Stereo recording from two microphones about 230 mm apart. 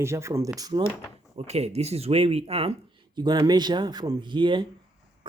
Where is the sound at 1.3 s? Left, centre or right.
Right.